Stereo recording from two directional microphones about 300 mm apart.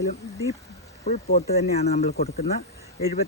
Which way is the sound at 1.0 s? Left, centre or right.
Left.